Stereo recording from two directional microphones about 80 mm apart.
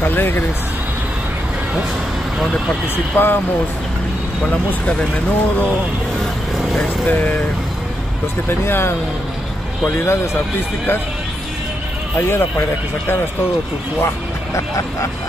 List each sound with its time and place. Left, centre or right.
0.0 s speech: left
2.3 s speech: centre
3.1 s speech: left
4.6 s speech: left
7.1 s speech: left
8.5 s speech: left
9.9 s speech: left
12.2 s speech: left
14.0 s speech: left